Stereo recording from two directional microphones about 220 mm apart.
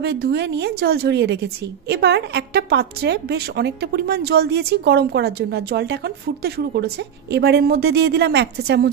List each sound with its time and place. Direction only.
0.0 s a woman's voice: 45° right (ahead or behind)